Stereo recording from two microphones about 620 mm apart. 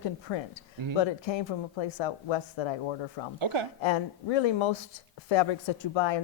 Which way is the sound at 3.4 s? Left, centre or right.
Right.